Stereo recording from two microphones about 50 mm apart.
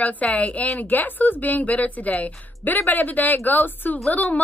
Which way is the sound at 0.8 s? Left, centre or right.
Left.